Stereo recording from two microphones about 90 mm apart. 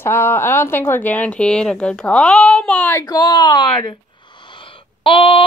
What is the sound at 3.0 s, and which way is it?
Speech, 50° left (ahead or behind).